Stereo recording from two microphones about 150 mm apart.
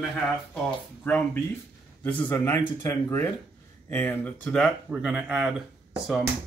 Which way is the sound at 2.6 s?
30° left (ahead or behind).